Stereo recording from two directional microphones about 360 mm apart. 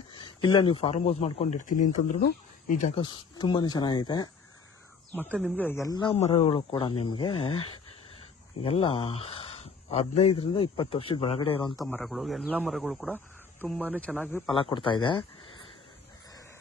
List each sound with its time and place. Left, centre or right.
0.1 s a man's voice: centre
8.6 s speech: centre
11.8 s a man's voice: centre